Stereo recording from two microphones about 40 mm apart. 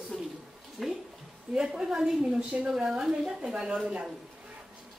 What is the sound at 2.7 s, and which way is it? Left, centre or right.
A woman's voice, centre.